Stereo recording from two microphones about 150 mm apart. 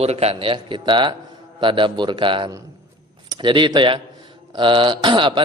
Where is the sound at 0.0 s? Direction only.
45° right (ahead or behind).